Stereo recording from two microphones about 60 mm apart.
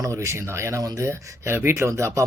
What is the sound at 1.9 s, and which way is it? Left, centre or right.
Speech, right.